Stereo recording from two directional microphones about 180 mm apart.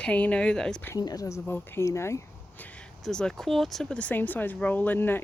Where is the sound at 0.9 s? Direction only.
20° left (ahead or behind).